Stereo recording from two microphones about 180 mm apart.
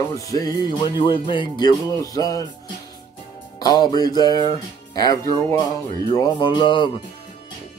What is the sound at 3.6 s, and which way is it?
Speech, 20° left (ahead or behind).